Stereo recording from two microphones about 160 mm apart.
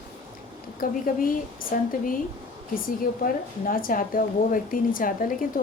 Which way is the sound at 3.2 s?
60° left (ahead or behind).